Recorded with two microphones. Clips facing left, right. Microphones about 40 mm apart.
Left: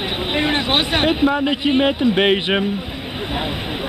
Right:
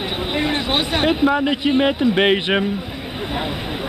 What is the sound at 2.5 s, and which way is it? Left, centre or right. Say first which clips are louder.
Speech: even; centre.